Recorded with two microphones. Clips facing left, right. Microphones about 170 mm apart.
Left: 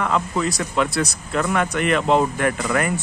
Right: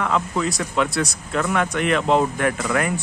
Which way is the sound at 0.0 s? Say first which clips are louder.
Left 1 dB; centre (ahead or behind).